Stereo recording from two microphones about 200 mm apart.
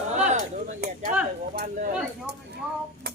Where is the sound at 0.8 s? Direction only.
55° right (ahead or behind).